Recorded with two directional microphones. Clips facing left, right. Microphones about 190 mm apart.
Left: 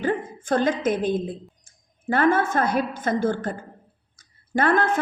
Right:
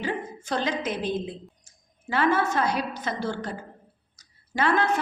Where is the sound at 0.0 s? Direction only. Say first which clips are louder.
Left 5 dB; 50° left (ahead or behind).